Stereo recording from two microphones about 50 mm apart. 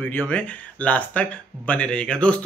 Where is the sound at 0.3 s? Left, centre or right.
Left.